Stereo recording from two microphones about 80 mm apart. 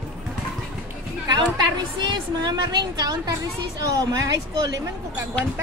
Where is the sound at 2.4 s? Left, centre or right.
Right.